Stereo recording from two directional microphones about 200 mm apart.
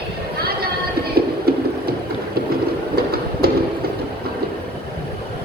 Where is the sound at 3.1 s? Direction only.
50° right (ahead or behind).